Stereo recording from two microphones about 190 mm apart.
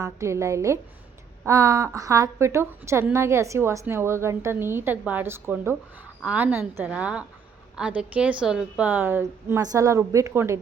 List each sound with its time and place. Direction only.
0.0 s a woman's voice: 15° right (ahead or behind)